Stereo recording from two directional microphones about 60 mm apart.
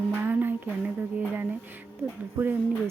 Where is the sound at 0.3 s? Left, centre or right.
Right.